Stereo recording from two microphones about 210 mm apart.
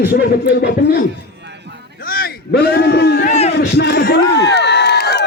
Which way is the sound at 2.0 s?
45° left (ahead or behind).